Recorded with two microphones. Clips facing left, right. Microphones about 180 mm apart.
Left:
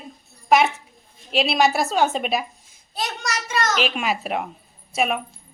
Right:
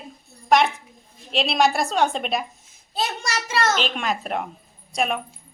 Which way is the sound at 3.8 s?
5° left (ahead or behind).